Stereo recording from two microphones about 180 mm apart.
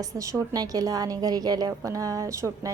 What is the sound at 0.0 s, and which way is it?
A woman's voice, 20° right (ahead or behind).